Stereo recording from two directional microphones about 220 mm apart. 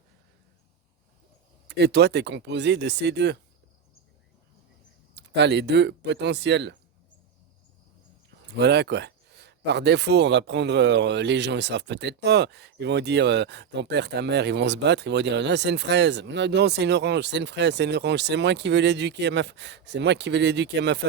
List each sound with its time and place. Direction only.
1.6 s speech: 50° right (ahead or behind)
5.1 s speech: 50° right (ahead or behind)
8.5 s speech: 50° right (ahead or behind)